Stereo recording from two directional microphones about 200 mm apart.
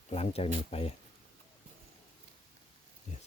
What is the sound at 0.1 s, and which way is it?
Speech, 30° left (ahead or behind).